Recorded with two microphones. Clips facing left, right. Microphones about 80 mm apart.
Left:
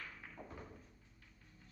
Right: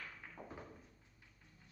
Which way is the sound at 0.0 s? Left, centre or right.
Centre.